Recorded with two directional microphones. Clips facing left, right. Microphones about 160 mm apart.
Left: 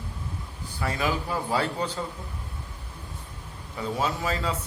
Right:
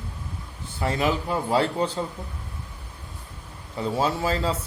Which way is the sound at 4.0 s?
30° right (ahead or behind).